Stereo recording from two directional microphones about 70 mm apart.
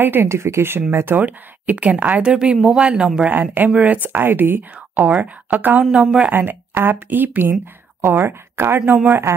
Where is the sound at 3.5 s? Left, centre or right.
Right.